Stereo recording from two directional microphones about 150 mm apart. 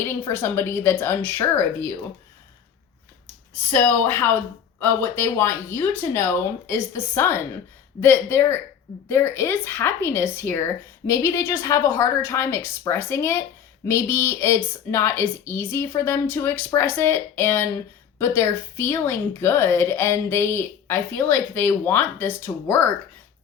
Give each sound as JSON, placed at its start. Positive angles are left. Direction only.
{"t": 0.0, "sound": "speech", "side_deg": 15}
{"t": 3.7, "sound": "speech", "side_deg": 15}